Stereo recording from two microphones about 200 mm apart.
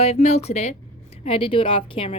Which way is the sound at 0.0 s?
30° left (ahead or behind).